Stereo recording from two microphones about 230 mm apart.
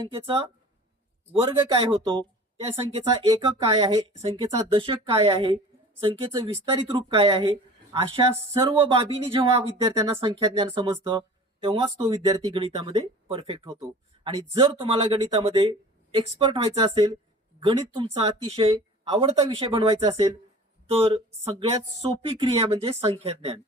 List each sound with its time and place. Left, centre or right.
0.0 s speech: right